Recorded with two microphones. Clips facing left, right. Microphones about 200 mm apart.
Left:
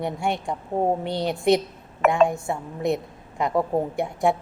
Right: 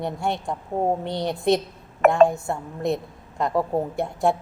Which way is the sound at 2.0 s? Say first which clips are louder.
Right 3 dB; 50° right (ahead or behind).